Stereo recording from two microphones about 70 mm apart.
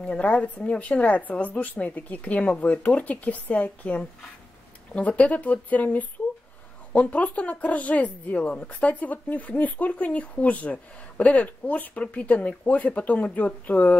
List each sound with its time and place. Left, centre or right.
0.0 s speech: centre